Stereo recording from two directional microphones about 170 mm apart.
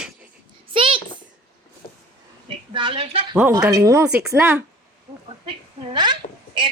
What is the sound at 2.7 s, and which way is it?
Speech, 30° right (ahead or behind).